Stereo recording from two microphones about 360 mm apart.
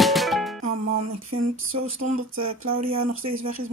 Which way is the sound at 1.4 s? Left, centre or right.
Right.